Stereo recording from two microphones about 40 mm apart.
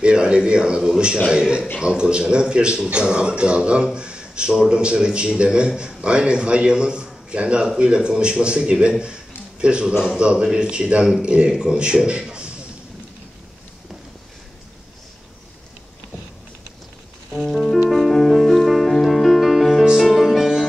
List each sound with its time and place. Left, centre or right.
0.0 s a man's voice: right
9.0 s a sound: right
10.1 s a man's voice: right
17.3 s music: centre